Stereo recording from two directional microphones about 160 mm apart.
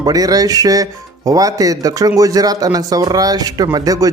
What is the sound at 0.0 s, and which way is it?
Speech, 25° right (ahead or behind).